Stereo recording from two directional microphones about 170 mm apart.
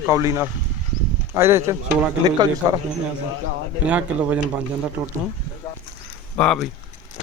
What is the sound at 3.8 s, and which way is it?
Speech, 5° right (ahead or behind).